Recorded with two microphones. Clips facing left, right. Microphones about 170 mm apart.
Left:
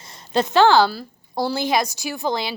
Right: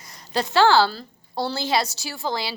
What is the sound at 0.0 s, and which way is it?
A woman's voice, 25° left (ahead or behind).